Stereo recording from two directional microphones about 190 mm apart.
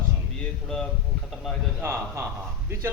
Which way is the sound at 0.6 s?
5° left (ahead or behind).